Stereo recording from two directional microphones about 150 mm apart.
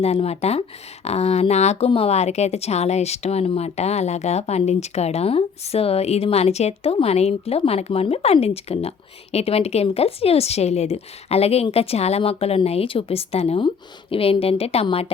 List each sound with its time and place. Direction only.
0.0 s speech: 45° left (ahead or behind)